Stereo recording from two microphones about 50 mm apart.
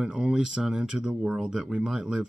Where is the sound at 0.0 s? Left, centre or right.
Centre.